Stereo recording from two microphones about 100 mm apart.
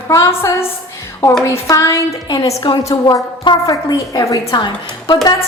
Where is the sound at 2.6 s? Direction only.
60° left (ahead or behind).